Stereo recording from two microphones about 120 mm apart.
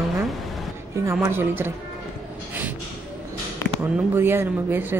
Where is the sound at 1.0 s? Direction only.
20° right (ahead or behind).